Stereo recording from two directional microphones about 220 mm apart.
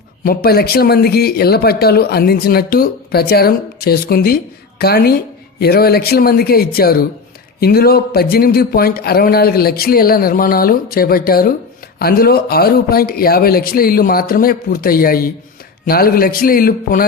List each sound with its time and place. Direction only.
0.3 s a man's voice: 45° left (ahead or behind)